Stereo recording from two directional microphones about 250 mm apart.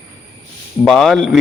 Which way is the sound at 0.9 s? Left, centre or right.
Centre.